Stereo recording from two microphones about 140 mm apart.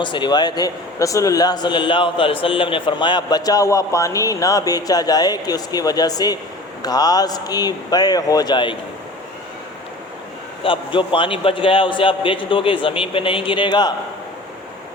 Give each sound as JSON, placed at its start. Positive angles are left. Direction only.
{"t": 0.0, "sound": "a man's voice", "side_deg": 35}
{"t": 10.6, "sound": "a man's voice", "side_deg": 40}